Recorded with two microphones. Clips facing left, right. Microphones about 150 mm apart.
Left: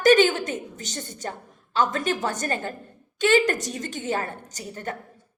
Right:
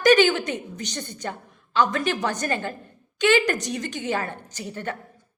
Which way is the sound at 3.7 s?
40° left (ahead or behind).